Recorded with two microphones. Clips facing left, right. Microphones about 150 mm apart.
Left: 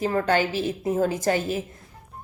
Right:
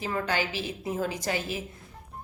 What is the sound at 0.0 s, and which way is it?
A woman's voice, 45° left (ahead or behind).